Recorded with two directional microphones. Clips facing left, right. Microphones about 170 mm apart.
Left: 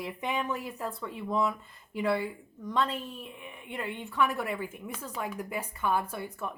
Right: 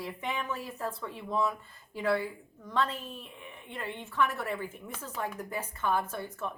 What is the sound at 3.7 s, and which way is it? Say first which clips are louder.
Speech: left 3 dB; 15° left (ahead or behind).